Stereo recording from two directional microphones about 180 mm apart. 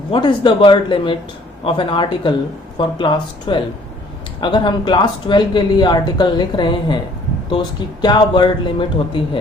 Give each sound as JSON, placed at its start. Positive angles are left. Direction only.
{"t": 0.1, "sound": "speech", "side_deg": 25}